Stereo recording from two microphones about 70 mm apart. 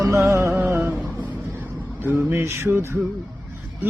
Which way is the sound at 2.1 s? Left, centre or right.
Right.